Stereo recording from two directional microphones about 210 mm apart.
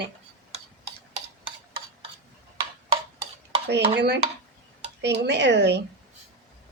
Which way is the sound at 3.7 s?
50° right (ahead or behind).